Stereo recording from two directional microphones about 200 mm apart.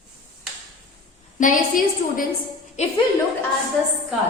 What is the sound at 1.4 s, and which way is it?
A woman's voice, 40° left (ahead or behind).